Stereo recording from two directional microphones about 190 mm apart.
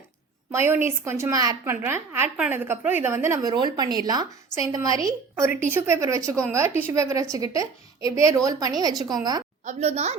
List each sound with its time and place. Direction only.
0.5 s a woman's voice: 10° right (ahead or behind)
9.6 s a woman's voice: 35° right (ahead or behind)